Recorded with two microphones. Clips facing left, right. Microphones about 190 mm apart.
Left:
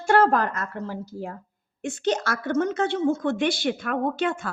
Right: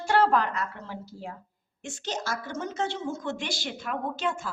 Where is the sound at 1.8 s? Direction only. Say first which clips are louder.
Left 10 dB; 55° left (ahead or behind).